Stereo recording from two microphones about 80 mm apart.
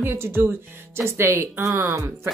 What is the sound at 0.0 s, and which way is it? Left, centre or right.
A woman's voice, right.